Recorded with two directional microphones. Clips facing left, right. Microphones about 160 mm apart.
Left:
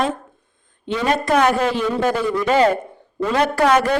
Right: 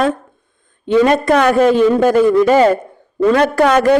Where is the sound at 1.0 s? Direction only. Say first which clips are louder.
Even; 60° right (ahead or behind).